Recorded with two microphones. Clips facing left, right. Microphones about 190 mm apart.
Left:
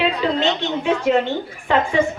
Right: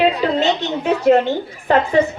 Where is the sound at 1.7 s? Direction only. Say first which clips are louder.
Right 3 dB; 40° right (ahead or behind).